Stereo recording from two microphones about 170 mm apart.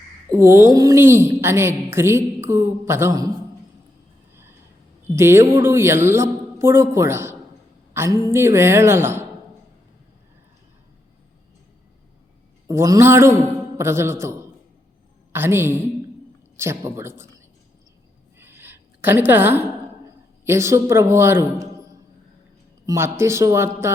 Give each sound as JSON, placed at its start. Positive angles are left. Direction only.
{"t": 0.3, "sound": "a woman's voice", "side_deg": -15}
{"t": 5.1, "sound": "a woman's voice", "side_deg": -15}
{"t": 12.6, "sound": "a woman's voice", "side_deg": -20}
{"t": 18.3, "sound": "a sound", "side_deg": -15}
{"t": 20.4, "sound": "a man's voice", "side_deg": -15}